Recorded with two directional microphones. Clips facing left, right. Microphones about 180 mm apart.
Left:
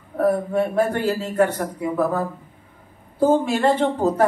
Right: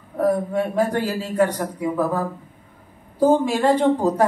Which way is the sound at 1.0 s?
10° right (ahead or behind).